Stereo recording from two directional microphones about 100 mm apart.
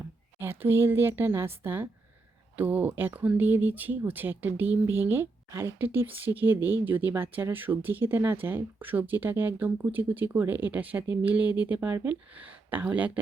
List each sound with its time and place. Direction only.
0.6 s speech: 20° right (ahead or behind)